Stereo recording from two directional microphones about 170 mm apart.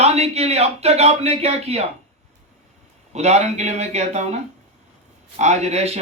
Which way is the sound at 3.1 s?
40° right (ahead or behind).